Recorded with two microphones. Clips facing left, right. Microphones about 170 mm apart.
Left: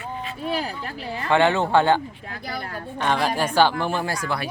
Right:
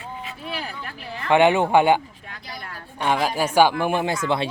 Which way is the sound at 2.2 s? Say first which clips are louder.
Left 5 dB; 35° left (ahead or behind).